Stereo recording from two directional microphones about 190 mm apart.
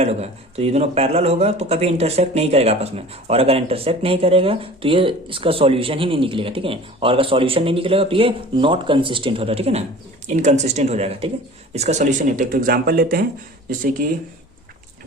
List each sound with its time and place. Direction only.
0.0 s speech: 35° right (ahead or behind); by 13.2 s 50° right (ahead or behind)